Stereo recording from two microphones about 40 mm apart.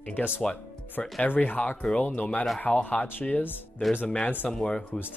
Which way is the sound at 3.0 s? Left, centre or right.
Left.